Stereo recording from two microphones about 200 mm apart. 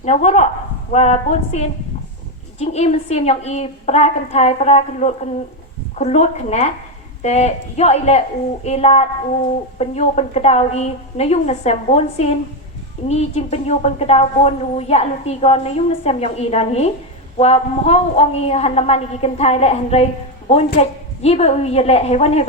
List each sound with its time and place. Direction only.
0.0 s a woman's voice: 35° left (ahead or behind)